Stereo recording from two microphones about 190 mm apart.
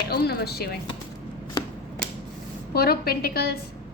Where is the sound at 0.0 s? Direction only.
55° left (ahead or behind).